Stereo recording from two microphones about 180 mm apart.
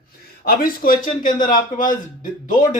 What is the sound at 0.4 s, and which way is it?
A man's voice, 50° left (ahead or behind).